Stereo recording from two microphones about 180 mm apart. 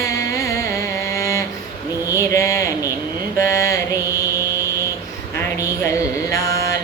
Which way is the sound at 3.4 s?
15° left (ahead or behind).